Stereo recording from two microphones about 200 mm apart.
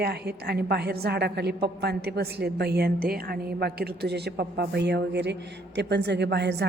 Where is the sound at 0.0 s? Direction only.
55° right (ahead or behind).